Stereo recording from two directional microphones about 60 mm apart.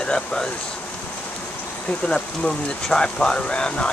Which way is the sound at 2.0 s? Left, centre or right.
Centre.